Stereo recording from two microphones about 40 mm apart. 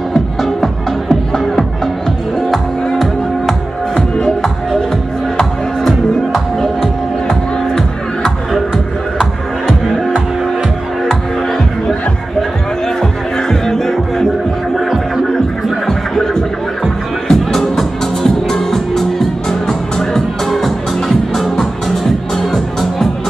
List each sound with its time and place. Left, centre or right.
0.1 s music: centre
4.2 s music: centre
7.2 s music: centre
9.2 s music: centre
11.1 s music: centre
15.9 s music: centre